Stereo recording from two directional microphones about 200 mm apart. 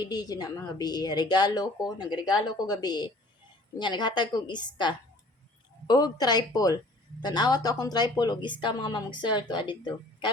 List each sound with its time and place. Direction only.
0.0 s a woman's voice: 20° left (ahead or behind)